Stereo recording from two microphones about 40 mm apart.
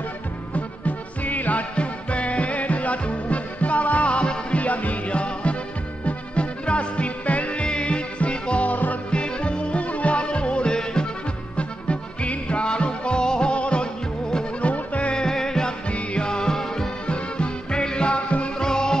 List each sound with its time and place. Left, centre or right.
0.6 s music: left
8.6 s music: left
9.1 s music: left
11.5 s music: left
15.1 s music: centre
15.9 s music: left
17.0 s music: left
18.6 s music: centre